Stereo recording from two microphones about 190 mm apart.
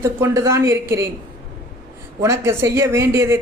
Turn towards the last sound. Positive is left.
turn(degrees=-15)  # may be behind; listen again after turning